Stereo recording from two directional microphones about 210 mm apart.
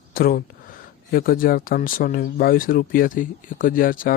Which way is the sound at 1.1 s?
45° left (ahead or behind).